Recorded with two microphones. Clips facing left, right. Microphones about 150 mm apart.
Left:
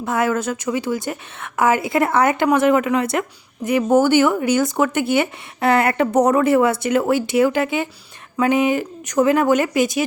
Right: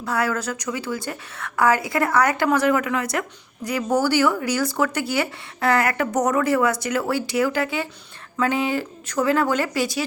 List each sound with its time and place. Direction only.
0.0 s a woman's voice: 20° left (ahead or behind)